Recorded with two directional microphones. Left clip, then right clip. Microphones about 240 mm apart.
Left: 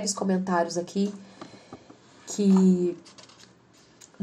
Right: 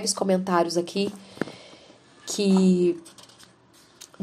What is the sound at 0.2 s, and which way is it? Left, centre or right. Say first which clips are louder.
Speech: right 6 dB; right.